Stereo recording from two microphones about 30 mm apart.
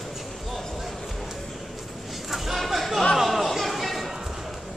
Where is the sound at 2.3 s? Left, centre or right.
Centre.